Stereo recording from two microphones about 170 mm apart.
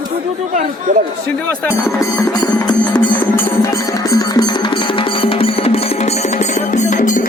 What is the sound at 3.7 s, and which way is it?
Music, 20° left (ahead or behind).